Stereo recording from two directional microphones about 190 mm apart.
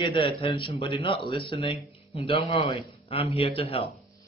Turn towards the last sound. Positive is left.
turn(degrees=30)  # may be behind; listen again after turning